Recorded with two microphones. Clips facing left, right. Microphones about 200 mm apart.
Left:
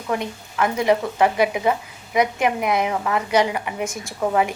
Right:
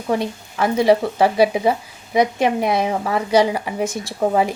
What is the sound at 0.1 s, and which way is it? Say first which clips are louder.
A woman's voice: right 4 dB; 30° right (ahead or behind).